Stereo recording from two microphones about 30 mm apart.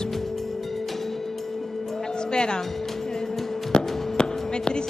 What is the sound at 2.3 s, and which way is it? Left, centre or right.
Speech, left.